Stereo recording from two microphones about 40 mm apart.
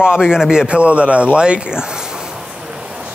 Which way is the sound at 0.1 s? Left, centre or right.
Centre.